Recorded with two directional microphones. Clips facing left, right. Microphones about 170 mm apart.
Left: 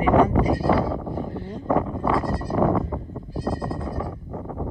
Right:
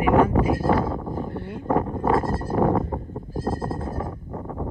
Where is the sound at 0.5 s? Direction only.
50° right (ahead or behind).